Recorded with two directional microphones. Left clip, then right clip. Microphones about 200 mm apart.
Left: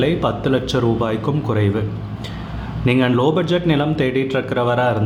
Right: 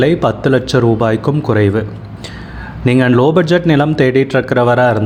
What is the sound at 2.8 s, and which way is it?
Speech, 30° right (ahead or behind).